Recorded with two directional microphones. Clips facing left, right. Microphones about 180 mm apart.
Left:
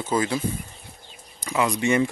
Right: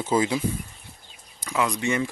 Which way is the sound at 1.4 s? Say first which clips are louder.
Left 2 dB; 5° left (ahead or behind).